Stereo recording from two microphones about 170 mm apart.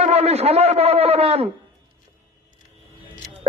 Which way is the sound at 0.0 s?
40° right (ahead or behind).